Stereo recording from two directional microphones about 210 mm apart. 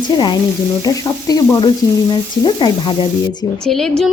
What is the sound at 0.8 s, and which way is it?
Sizzle, 15° left (ahead or behind).